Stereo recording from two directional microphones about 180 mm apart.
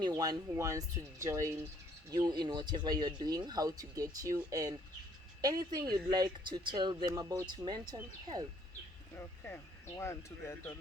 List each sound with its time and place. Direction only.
0.0 s speech: 20° right (ahead or behind)
9.1 s speech: 10° left (ahead or behind)